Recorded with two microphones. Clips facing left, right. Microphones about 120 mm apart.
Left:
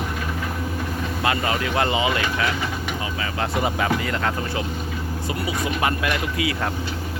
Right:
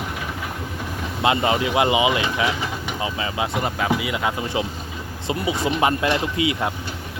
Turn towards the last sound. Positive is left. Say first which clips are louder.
# right 2 dB
turn(degrees=-20)  # may be behind; listen again after turning